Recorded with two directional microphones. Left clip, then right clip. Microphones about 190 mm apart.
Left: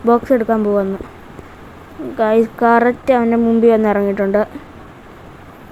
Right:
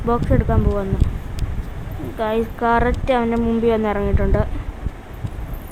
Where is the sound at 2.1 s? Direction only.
15° left (ahead or behind).